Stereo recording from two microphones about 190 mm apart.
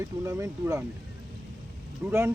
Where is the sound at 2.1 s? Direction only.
10° right (ahead or behind).